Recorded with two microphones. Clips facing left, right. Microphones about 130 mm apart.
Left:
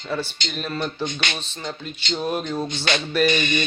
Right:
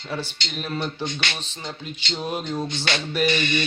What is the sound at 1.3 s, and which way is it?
Speech, 15° right (ahead or behind).